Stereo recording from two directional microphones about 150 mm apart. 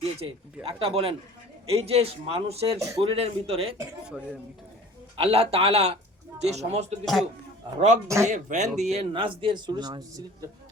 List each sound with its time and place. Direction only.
0.0 s speech: 40° right (ahead or behind)
2.7 s speech: 20° right (ahead or behind)
3.0 s speech: 40° right (ahead or behind)
5.1 s speech: 40° right (ahead or behind)
7.0 s a man's voice: centre (ahead or behind)
8.0 s speech: 20° right (ahead or behind)
8.3 s speech: 50° right (ahead or behind); by 10.2 s 25° right (ahead or behind)